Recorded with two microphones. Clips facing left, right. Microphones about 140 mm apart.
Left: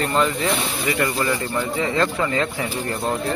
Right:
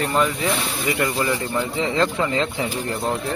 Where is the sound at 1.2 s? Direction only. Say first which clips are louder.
Even; 20° right (ahead or behind).